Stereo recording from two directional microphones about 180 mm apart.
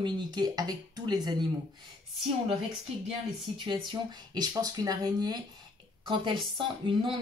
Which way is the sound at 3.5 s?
25° right (ahead or behind).